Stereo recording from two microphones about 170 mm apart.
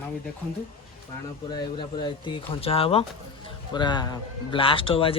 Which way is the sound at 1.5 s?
25° left (ahead or behind).